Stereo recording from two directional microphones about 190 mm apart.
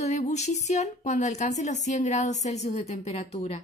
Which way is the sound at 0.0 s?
35° left (ahead or behind).